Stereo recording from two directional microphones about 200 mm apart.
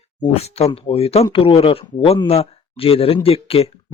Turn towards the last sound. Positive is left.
turn(degrees=30)  # may be behind; listen again after turning